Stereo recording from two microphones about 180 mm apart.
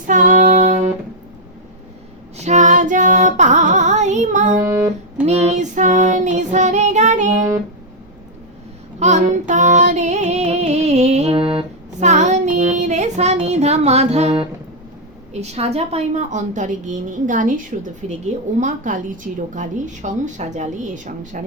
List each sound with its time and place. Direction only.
0.1 s child singing: 45° right (ahead or behind)
2.4 s music: 40° right (ahead or behind)
4.6 s music: 15° right (ahead or behind)
5.2 s child singing: 35° right (ahead or behind)
9.0 s music: 40° right (ahead or behind)
15.3 s a woman's voice: 35° right (ahead or behind)